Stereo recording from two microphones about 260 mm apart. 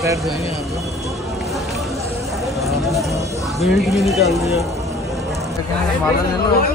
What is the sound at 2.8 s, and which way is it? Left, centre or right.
Speech, centre.